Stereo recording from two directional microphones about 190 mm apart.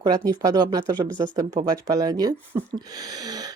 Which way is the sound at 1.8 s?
20° right (ahead or behind).